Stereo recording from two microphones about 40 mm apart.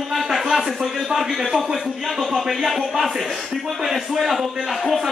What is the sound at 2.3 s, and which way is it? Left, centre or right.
A man's voice, centre.